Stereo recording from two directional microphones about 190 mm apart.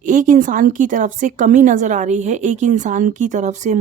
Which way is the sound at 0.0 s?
40° right (ahead or behind).